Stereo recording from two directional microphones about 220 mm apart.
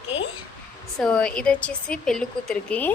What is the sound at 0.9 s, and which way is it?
A woman's voice, 5° left (ahead or behind).